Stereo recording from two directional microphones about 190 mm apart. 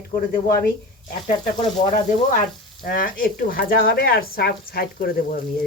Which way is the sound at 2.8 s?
50° left (ahead or behind).